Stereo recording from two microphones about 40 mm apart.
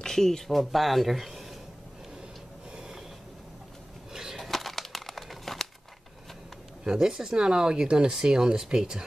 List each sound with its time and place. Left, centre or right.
0.0 s speech: centre
2.7 s train: centre
4.1 s a sound: centre
4.4 s crumpling: centre
6.8 s speech: centre